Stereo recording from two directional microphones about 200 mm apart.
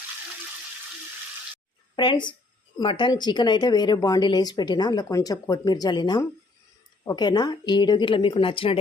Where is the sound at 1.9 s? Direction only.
25° left (ahead or behind).